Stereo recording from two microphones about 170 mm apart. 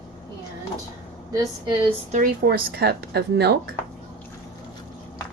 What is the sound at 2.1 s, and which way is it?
Speech, 55° right (ahead or behind).